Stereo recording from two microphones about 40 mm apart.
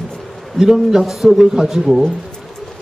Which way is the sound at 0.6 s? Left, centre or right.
Centre.